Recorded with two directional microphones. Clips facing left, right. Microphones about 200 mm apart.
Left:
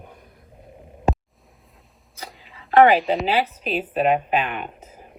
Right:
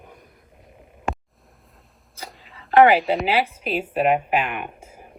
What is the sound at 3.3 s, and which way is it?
Speech, 10° right (ahead or behind).